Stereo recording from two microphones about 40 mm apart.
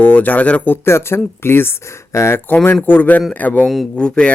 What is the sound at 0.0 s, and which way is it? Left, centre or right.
Speech, left.